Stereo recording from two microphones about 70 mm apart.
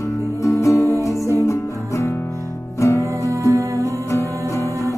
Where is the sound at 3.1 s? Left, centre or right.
Right.